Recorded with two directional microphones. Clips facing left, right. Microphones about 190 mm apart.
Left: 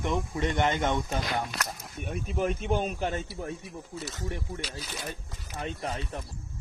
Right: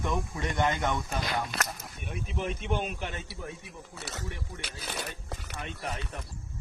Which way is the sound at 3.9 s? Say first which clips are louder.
Left 4 dB; 75° right (ahead or behind).